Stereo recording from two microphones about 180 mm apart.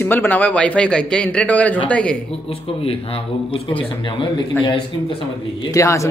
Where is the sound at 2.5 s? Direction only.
35° left (ahead or behind).